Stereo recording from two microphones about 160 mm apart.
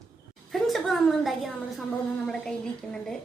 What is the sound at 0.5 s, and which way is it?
A woman's voice, centre (ahead or behind).